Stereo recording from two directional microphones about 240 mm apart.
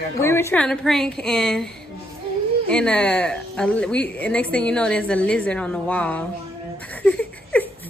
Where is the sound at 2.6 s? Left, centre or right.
Centre.